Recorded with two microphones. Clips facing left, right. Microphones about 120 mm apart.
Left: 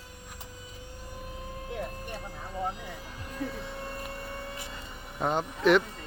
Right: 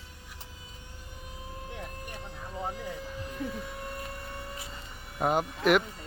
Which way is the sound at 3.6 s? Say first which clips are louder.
Left 1 dB; 25° left (ahead or behind).